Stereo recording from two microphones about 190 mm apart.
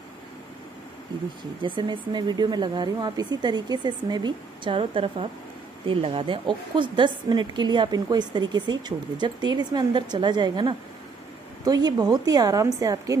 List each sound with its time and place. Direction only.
1.8 s a woman's voice: 25° right (ahead or behind)